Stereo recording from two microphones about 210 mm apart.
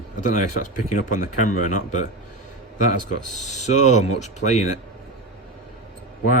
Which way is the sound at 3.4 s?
35° left (ahead or behind).